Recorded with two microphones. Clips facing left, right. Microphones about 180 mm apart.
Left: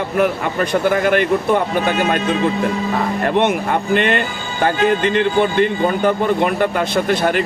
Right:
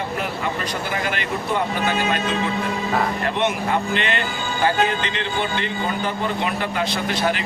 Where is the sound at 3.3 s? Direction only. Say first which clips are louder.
Left 8 dB; 55° left (ahead or behind).